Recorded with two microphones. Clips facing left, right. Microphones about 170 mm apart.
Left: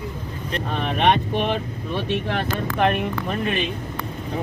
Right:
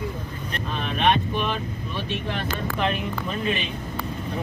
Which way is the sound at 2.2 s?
65° left (ahead or behind).